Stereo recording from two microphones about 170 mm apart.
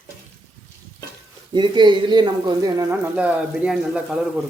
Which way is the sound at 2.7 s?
15° right (ahead or behind).